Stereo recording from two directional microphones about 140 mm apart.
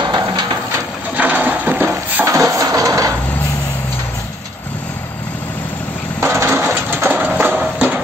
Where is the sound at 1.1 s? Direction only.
10° right (ahead or behind).